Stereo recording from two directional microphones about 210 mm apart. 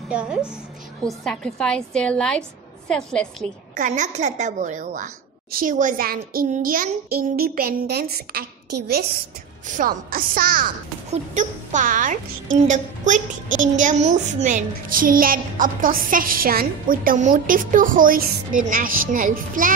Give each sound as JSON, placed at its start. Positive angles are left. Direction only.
{"t": 0.1, "sound": "a woman's voice", "side_deg": -5}
{"t": 3.7, "sound": "a woman's voice", "side_deg": -35}
{"t": 9.7, "sound": "a woman's voice", "side_deg": -40}